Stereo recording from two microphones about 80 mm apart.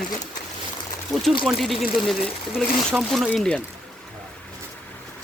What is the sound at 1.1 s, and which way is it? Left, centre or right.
Speech, centre.